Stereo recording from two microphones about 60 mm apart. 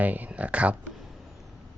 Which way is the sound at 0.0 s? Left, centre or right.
Right.